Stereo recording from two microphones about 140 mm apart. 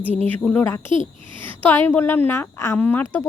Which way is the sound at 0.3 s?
10° left (ahead or behind).